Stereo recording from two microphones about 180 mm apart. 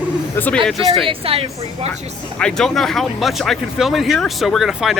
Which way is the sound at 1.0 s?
30° right (ahead or behind).